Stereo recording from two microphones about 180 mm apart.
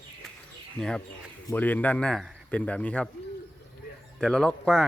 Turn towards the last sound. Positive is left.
turn(degrees=0)  # may be behind; listen again after turning